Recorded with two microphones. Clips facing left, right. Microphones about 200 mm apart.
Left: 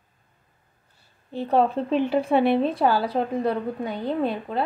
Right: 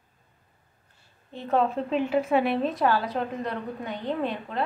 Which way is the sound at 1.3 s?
35° left (ahead or behind).